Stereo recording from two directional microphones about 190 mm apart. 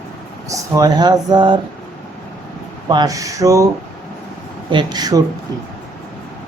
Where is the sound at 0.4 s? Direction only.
15° right (ahead or behind).